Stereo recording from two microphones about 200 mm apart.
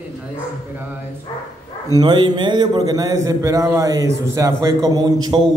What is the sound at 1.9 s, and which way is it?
A man's voice, 20° right (ahead or behind).